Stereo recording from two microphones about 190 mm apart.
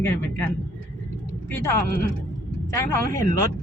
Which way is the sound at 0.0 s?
10° left (ahead or behind).